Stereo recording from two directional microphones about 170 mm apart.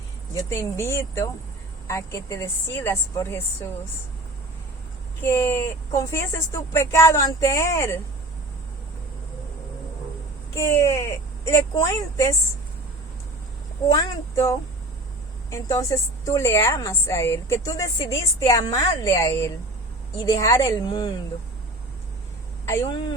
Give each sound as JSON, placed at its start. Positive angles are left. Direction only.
{"t": 0.3, "sound": "a woman's voice", "side_deg": 15}
{"t": 5.2, "sound": "a woman's voice", "side_deg": 15}
{"t": 10.5, "sound": "a woman's voice", "side_deg": 20}
{"t": 13.8, "sound": "a woman's voice", "side_deg": 20}
{"t": 22.6, "sound": "a woman's voice", "side_deg": 20}